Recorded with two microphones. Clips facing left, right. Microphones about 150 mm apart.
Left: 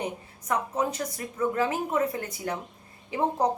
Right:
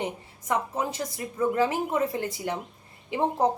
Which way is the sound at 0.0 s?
25° right (ahead or behind).